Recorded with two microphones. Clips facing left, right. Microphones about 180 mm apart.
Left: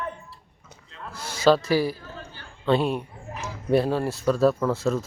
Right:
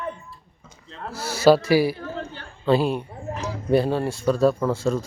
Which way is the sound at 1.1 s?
10° right (ahead or behind).